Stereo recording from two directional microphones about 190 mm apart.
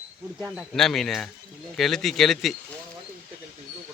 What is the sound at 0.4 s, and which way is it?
Speech, centre (ahead or behind).